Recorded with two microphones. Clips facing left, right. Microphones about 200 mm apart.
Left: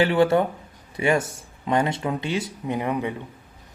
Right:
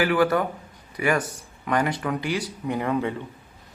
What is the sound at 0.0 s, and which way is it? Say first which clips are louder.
Speech: left 2 dB; 25° left (ahead or behind).